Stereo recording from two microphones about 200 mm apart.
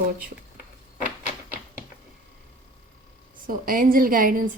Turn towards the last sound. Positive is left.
turn(degrees=-45)  # may be behind; listen again after turning